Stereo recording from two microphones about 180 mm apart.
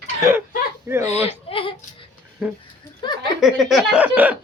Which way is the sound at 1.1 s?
35° left (ahead or behind).